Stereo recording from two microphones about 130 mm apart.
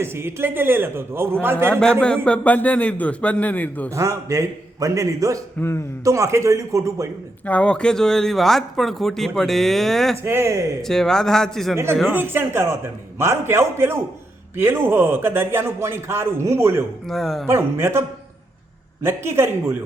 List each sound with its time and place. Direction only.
0.0 s a man's voice: 20° right (ahead or behind)
1.8 s a man's voice: 5° left (ahead or behind)
3.8 s a man's voice: 25° right (ahead or behind)
5.5 s a man's voice: 20° left (ahead or behind)
6.1 s a man's voice: 25° right (ahead or behind)
7.4 s speech: 10° left (ahead or behind)
10.2 s a man's voice: 20° right (ahead or behind)
10.8 s speech: 5° left (ahead or behind)
12.1 s a man's voice: 15° right (ahead or behind)
17.1 s speech: centre (ahead or behind)
17.4 s a man's voice: 20° right (ahead or behind)
19.0 s a man's voice: 20° right (ahead or behind)